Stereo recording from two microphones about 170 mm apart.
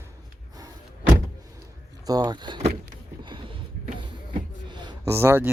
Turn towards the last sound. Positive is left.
turn(degrees=-15)  # may be behind; listen again after turning